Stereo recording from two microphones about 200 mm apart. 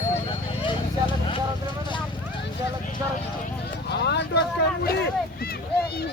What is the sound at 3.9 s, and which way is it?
Vehicle, 55° left (ahead or behind).